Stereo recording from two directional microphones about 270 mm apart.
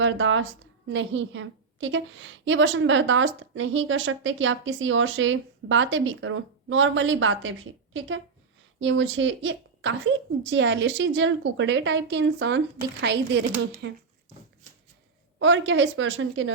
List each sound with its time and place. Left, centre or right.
0.0 s a woman's voice: right
15.4 s a woman's voice: right